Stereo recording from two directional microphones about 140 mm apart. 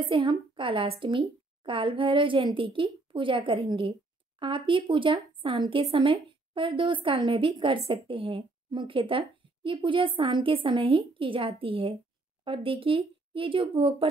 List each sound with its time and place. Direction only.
0.0 s speech: 35° right (ahead or behind)